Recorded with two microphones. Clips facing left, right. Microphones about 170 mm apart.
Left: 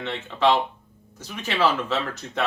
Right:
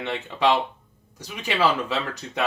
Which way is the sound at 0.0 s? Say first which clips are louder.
Left 1 dB; 15° right (ahead or behind).